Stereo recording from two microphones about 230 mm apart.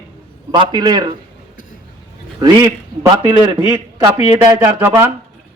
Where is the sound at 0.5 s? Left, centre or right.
Centre.